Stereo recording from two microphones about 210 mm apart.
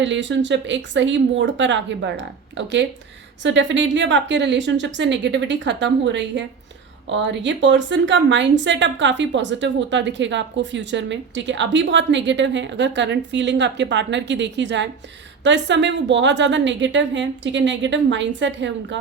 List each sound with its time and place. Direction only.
0.0 s speech: 60° right (ahead or behind)